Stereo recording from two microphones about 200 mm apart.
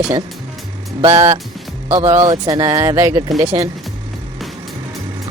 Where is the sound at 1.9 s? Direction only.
15° right (ahead or behind).